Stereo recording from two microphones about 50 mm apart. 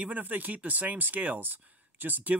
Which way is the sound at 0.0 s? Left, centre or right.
Right.